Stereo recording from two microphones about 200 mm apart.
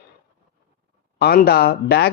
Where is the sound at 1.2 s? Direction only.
50° left (ahead or behind).